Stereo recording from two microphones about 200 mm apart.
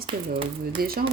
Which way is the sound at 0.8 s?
50° right (ahead or behind).